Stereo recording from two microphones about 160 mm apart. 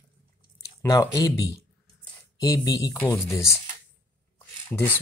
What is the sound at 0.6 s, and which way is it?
Speech, 20° left (ahead or behind).